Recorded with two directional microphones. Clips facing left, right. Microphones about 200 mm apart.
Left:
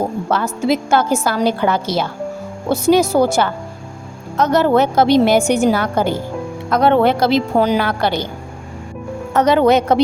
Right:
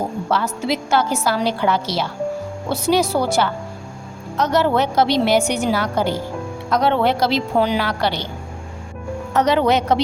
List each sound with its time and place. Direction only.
0.3 s a woman's voice: 50° left (ahead or behind)
9.3 s a woman's voice: 50° left (ahead or behind)